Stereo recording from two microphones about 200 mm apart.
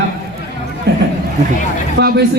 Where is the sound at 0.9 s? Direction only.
55° right (ahead or behind).